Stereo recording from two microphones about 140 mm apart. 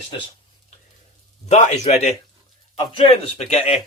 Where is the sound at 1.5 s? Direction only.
55° left (ahead or behind).